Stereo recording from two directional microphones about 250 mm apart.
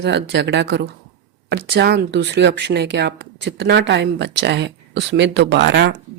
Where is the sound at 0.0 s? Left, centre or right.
Right.